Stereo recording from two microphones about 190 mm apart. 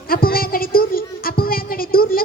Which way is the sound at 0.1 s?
50° left (ahead or behind).